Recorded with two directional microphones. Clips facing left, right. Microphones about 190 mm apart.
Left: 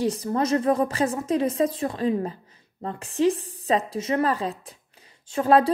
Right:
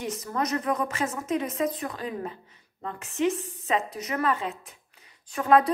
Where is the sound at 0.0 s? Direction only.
35° left (ahead or behind).